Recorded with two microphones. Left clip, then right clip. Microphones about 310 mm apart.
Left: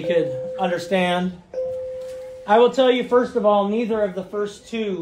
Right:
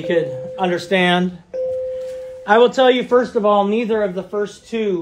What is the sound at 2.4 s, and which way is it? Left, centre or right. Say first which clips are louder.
Speech: right 3 dB; right.